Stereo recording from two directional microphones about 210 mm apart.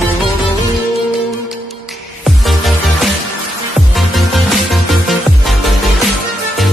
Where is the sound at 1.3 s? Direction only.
Centre (ahead or behind).